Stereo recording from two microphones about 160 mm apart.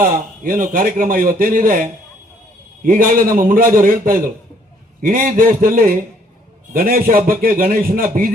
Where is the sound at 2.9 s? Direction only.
60° right (ahead or behind).